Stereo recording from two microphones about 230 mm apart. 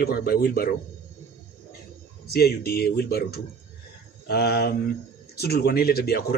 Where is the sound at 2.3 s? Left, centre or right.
Left.